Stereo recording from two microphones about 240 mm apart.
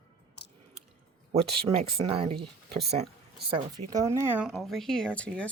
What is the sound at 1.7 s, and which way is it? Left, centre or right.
Speech, right.